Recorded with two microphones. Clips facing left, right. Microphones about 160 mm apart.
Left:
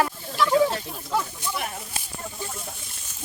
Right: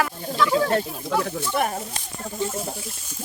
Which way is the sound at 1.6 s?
45° right (ahead or behind).